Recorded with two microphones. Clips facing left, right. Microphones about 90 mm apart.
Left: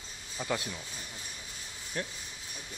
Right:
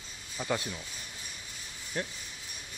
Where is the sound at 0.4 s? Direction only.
Centre (ahead or behind).